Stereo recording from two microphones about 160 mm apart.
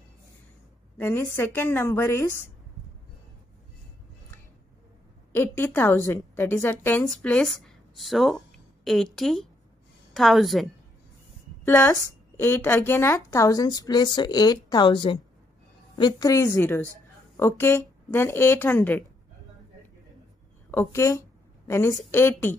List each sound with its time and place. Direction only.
0.9 s a woman's voice: 15° left (ahead or behind)
5.3 s a woman's voice: 15° left (ahead or behind)
11.6 s a woman's voice: 15° left (ahead or behind)
20.7 s a woman's voice: 15° left (ahead or behind)